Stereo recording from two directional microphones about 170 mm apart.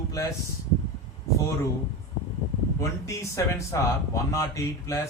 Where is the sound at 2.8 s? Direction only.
15° left (ahead or behind).